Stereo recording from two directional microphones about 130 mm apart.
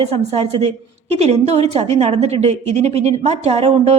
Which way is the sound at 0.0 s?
50° right (ahead or behind).